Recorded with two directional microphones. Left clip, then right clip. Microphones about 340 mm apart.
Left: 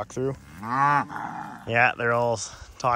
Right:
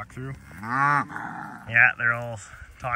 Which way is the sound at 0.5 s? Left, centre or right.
Left.